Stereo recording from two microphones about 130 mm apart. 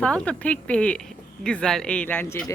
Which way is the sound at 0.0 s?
10° left (ahead or behind).